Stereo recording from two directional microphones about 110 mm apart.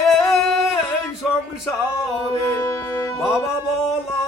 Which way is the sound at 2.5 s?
25° left (ahead or behind).